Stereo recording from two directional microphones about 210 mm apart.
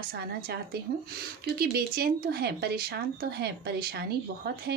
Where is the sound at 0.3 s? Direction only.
50° right (ahead or behind).